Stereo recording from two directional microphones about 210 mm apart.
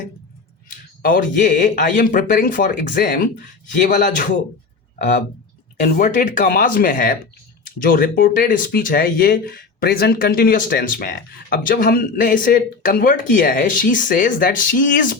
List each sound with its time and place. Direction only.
0.7 s speech: 40° left (ahead or behind)
5.8 s speech: 40° left (ahead or behind)